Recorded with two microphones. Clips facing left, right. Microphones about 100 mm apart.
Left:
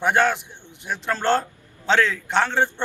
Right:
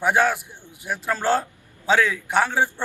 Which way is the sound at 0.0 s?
5° right (ahead or behind).